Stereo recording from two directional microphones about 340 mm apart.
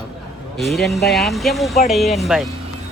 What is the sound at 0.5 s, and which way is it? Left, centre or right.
Speech, centre.